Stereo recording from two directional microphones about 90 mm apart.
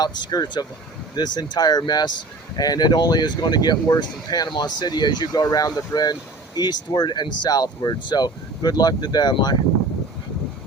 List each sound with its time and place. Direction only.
0.0 s speech: 45° left (ahead or behind)